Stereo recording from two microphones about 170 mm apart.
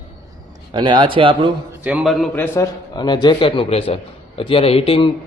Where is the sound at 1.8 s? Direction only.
10° right (ahead or behind).